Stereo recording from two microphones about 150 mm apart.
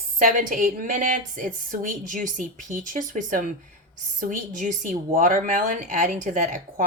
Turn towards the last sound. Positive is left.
turn(degrees=-60)  # may be behind; listen again after turning